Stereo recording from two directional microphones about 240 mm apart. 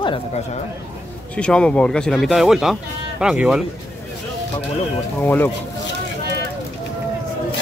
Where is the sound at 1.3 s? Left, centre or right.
Centre.